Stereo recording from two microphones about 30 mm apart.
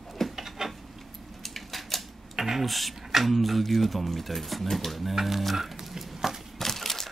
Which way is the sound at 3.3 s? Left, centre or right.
Centre.